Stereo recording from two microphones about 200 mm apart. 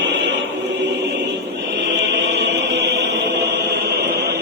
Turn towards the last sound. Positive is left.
turn(degrees=-55)  # may be behind; listen again after turning